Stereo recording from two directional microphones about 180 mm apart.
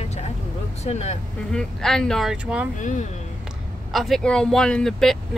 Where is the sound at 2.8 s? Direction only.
40° left (ahead or behind).